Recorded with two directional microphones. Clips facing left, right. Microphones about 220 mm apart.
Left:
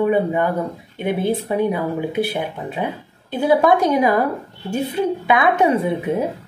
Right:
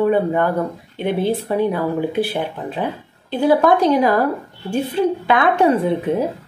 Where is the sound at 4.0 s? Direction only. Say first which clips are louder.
Right 1 dB; 20° left (ahead or behind).